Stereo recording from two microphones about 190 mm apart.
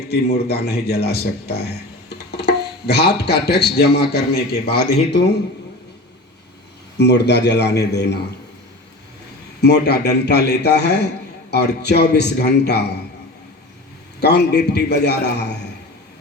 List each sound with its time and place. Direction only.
0.1 s a man's voice: 55° left (ahead or behind)
7.0 s a man's voice: 65° left (ahead or behind)
9.6 s a man's voice: 60° left (ahead or behind)
14.2 s a man's voice: 60° left (ahead or behind)